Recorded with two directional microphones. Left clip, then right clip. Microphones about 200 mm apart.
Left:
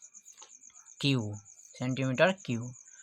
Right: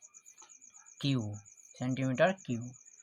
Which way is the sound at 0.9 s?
25° left (ahead or behind).